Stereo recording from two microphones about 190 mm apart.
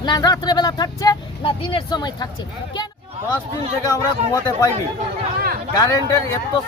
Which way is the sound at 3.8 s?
15° left (ahead or behind).